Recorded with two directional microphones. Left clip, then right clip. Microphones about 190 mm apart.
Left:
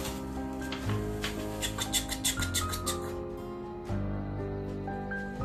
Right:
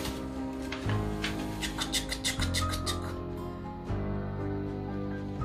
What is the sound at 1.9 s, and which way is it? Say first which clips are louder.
Music: even; 10° left (ahead or behind).